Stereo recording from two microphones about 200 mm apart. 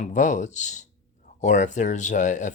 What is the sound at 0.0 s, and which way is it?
Speech, 35° left (ahead or behind).